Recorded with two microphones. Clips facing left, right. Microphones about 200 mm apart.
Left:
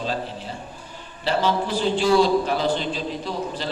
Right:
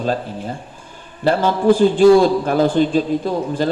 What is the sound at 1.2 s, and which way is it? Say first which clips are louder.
A man's voice: right 7 dB; 50° right (ahead or behind).